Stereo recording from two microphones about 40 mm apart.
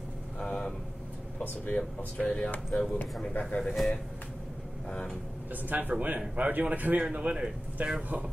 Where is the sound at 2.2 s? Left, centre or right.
Left.